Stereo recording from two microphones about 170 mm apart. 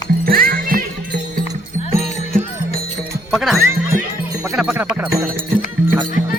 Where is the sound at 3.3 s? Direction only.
Centre (ahead or behind).